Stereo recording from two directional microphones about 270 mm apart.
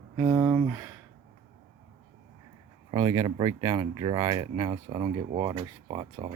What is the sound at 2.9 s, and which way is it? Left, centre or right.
Speech, centre.